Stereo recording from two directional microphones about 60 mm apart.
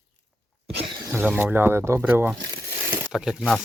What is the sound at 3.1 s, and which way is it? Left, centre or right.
Speech, centre.